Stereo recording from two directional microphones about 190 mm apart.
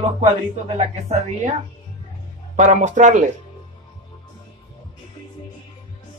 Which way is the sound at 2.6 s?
40° right (ahead or behind).